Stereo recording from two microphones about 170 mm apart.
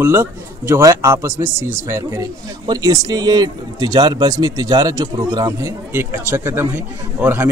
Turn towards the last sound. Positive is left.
turn(degrees=-10)  # may be behind; listen again after turning